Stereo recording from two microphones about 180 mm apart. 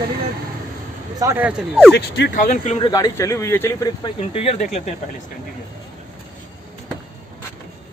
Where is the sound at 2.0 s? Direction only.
65° left (ahead or behind).